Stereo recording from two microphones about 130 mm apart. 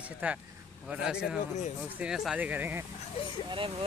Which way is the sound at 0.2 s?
15° right (ahead or behind).